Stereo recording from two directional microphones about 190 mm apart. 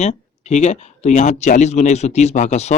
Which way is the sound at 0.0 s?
35° left (ahead or behind).